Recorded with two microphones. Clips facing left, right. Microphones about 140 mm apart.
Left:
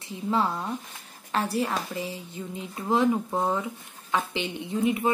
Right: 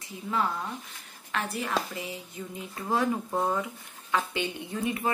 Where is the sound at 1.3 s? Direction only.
35° left (ahead or behind).